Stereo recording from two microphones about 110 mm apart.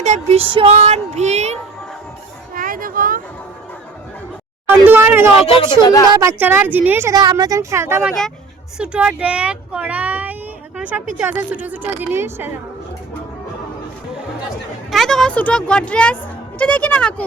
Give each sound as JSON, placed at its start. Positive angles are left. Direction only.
{"t": 0.0, "sound": "speech", "side_deg": -90}
{"t": 0.5, "sound": "speech", "side_deg": -70}
{"t": 4.7, "sound": "a sound", "side_deg": -15}
{"t": 5.5, "sound": "speech", "side_deg": 50}
{"t": 6.1, "sound": "speech", "side_deg": -30}
{"t": 6.4, "sound": "speech", "side_deg": -20}
{"t": 7.1, "sound": "speech", "side_deg": -35}
{"t": 8.8, "sound": "a woman's voice", "side_deg": -10}
{"t": 14.8, "sound": "speech", "side_deg": 0}